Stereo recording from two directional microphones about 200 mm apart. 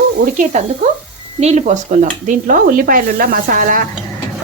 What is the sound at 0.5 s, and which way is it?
Speech, 35° right (ahead or behind).